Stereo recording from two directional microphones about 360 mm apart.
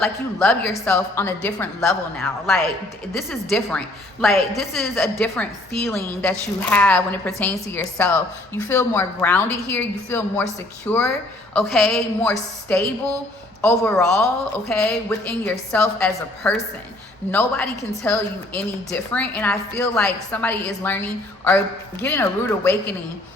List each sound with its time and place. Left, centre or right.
0.0 s a woman's voice: centre
22.0 s a woman's voice: centre